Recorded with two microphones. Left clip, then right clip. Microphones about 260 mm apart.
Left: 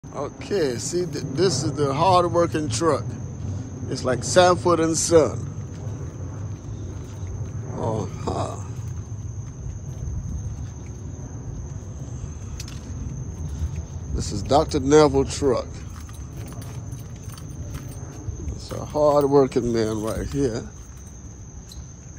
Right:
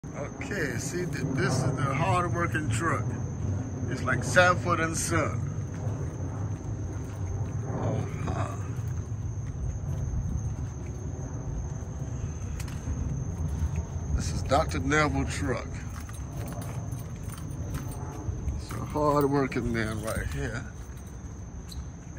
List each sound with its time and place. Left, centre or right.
0.5 s speech: centre
7.8 s a sound: centre
14.1 s speech: centre
18.7 s speech: centre
19.5 s speech: centre